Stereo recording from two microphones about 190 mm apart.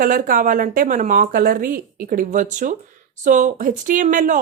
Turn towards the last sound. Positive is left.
turn(degrees=-40)  # may be behind; listen again after turning